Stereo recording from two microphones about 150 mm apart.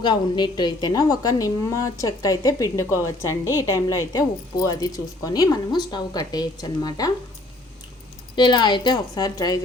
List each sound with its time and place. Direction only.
0.0 s a woman's voice: 30° left (ahead or behind)
8.4 s a woman's voice: 30° left (ahead or behind)